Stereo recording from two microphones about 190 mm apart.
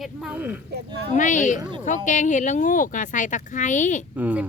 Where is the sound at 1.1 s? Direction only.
40° left (ahead or behind).